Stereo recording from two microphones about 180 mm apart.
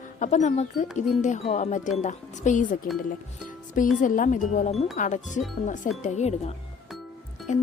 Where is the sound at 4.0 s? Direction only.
45° left (ahead or behind).